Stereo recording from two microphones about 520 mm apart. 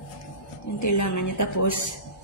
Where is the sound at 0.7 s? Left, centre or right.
Left.